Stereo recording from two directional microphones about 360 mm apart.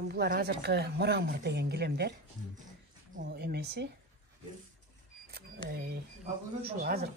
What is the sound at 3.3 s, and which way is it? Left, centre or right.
Speech, right.